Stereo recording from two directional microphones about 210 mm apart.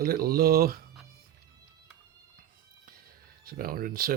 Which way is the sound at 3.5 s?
45° right (ahead or behind).